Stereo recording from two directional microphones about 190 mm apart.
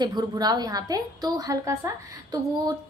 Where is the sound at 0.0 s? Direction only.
20° right (ahead or behind).